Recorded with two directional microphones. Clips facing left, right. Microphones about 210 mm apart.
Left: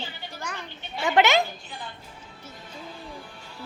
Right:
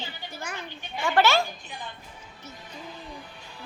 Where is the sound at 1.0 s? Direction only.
20° left (ahead or behind).